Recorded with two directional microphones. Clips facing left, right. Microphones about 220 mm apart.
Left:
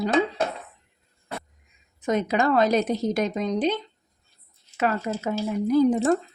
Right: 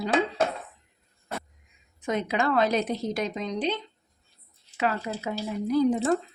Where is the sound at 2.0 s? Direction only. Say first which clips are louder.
Left 4 dB; 45° left (ahead or behind).